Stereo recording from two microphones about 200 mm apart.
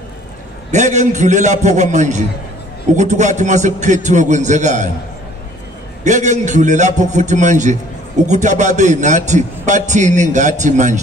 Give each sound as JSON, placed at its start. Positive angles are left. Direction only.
{"t": 0.7, "sound": "a man's voice", "side_deg": -35}
{"t": 6.0, "sound": "a man's voice", "side_deg": -35}